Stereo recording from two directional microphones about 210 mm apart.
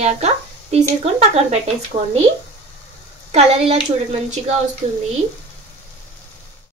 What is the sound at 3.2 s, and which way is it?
Speech, 30° right (ahead or behind).